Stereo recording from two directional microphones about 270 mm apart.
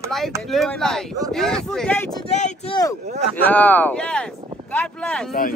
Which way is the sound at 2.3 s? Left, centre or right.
Left.